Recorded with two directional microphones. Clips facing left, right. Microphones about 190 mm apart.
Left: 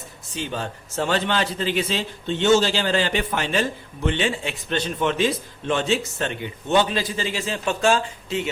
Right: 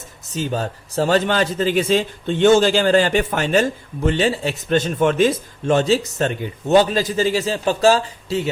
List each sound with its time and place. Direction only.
0.3 s a man's voice: 40° right (ahead or behind)